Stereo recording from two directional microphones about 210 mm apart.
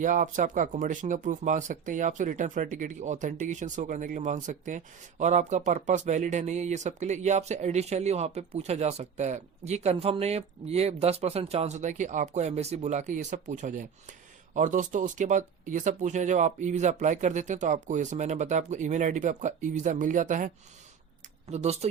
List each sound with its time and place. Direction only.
0.0 s speech: 40° right (ahead or behind)
21.5 s speech: 30° right (ahead or behind)